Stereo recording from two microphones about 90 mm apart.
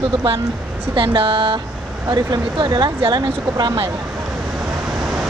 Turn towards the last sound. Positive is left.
turn(degrees=-50)  # may be behind; listen again after turning